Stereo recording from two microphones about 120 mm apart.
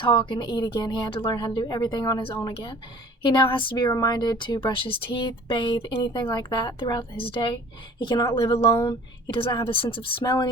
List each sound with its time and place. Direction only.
0.0 s a woman's voice: 40° left (ahead or behind); by 9.0 s 25° left (ahead or behind)
9.2 s a woman's voice: 45° left (ahead or behind)